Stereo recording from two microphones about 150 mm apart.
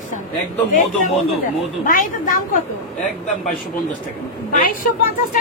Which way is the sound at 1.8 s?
65° left (ahead or behind).